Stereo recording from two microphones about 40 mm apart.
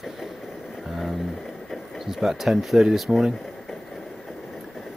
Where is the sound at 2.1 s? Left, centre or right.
Centre.